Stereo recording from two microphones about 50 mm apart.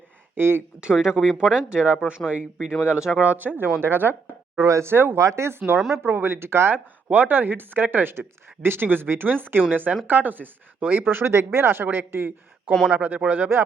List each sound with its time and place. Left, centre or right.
0.3 s speech: right
0.9 s speech: centre
3.2 s speech: right
4.5 s speech: right
4.9 s speech: right
5.1 s speech: right
5.5 s speech: right
12.9 s speech: right